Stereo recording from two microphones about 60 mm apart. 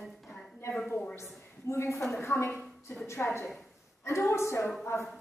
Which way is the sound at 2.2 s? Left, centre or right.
Left.